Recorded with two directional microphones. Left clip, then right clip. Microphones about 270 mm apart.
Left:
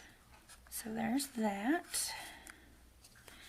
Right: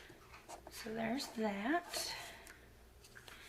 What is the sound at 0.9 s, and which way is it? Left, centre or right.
Speech, left.